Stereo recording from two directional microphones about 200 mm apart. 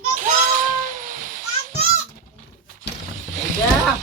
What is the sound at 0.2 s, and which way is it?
Children playing, 40° right (ahead or behind).